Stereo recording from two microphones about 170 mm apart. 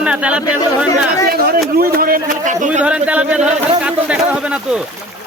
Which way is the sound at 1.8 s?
60° right (ahead or behind).